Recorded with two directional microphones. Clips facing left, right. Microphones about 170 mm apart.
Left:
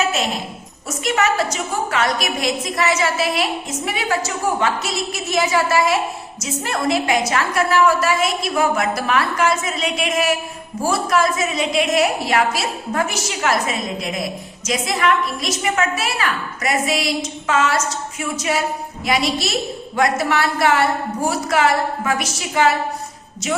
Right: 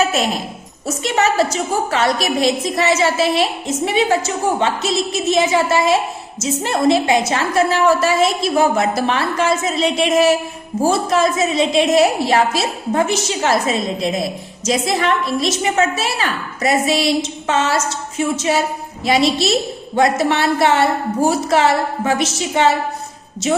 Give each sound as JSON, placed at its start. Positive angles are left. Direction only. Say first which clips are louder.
{"t": 0.9, "sound": "a woman's voice", "louder": "right 2 dB", "side_deg": -25}